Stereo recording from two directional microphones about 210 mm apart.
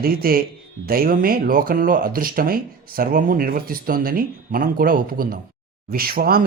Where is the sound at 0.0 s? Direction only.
45° right (ahead or behind).